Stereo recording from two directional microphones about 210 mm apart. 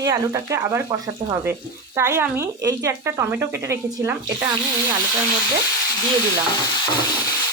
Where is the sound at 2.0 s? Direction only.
10° right (ahead or behind).